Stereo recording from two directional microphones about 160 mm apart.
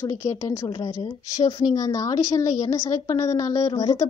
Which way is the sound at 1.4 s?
20° left (ahead or behind).